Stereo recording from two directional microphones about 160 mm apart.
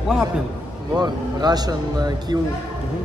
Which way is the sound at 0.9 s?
25° right (ahead or behind).